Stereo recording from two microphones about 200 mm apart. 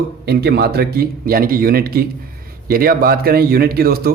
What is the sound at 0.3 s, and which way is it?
Speech, 55° right (ahead or behind).